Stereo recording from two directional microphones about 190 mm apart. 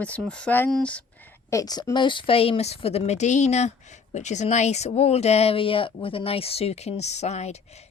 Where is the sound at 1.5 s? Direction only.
20° left (ahead or behind).